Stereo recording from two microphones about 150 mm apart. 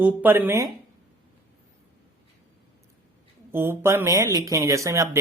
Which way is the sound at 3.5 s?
15° right (ahead or behind).